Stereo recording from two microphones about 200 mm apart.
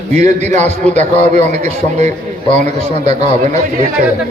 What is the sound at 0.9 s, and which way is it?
Speech, 10° left (ahead or behind).